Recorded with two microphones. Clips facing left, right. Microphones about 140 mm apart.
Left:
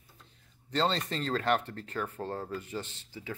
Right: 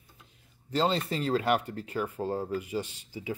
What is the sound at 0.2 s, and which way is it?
Speech, 10° right (ahead or behind).